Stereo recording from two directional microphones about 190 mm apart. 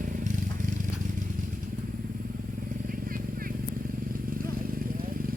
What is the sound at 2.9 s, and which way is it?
Vehicle, 50° right (ahead or behind).